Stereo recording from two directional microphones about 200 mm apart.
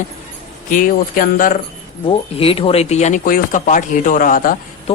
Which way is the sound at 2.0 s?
30° left (ahead or behind).